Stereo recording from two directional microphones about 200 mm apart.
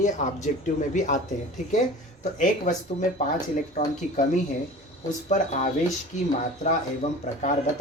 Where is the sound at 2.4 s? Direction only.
40° left (ahead or behind).